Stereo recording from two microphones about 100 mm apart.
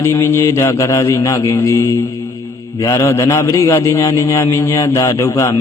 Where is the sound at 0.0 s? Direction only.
25° left (ahead or behind).